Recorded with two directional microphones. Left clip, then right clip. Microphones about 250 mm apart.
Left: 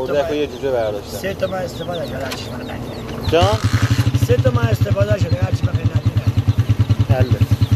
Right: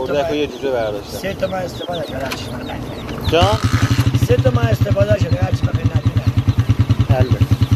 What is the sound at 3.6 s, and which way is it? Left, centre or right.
Vehicle, right.